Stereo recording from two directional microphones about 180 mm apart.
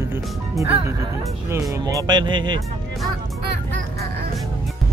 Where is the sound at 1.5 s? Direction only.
20° right (ahead or behind).